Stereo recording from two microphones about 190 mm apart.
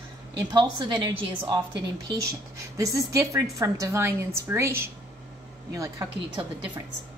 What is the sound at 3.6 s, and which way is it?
A woman's voice, 15° right (ahead or behind).